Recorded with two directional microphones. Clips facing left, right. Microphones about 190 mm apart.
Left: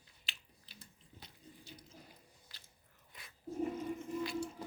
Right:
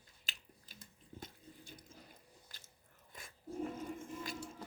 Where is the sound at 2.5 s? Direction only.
50° right (ahead or behind).